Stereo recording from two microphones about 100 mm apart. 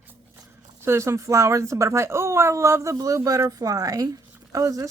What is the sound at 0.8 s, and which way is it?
Speech, 25° right (ahead or behind).